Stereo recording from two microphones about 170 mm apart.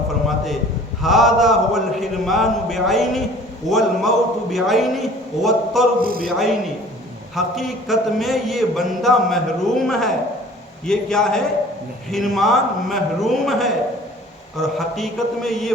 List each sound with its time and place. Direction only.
1.0 s a man's voice: centre (ahead or behind)
6.0 s a man's voice: 60° right (ahead or behind)
6.2 s a man's voice: centre (ahead or behind)